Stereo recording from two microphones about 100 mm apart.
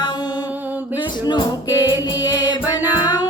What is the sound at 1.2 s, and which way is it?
Music, 45° left (ahead or behind).